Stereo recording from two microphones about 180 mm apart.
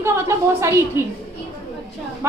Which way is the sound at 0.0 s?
15° right (ahead or behind).